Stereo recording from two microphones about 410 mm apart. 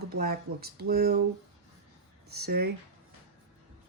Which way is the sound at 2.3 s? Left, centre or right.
Right.